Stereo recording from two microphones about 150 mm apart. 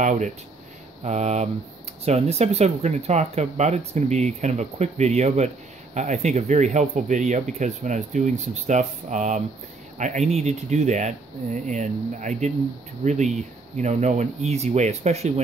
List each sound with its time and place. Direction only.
0.0 s speech: 55° right (ahead or behind)